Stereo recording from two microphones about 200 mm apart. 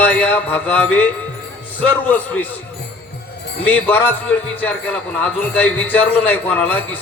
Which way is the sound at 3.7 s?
10° left (ahead or behind).